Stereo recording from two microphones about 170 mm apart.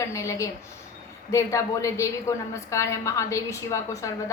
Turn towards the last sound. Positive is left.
turn(degrees=20)  # may be behind; listen again after turning